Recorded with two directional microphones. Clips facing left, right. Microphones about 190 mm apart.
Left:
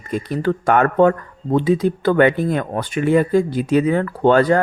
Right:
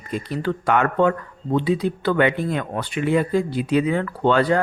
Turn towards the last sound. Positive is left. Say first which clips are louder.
# left 4 dB
turn(degrees=45)  # may be behind; listen again after turning